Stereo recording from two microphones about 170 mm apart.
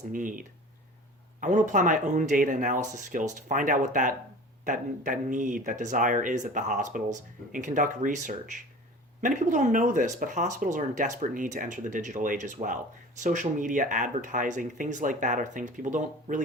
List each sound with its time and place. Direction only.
0.1 s speech: 50° right (ahead or behind)